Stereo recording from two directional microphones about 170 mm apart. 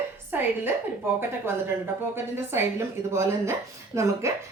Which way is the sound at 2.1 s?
15° right (ahead or behind).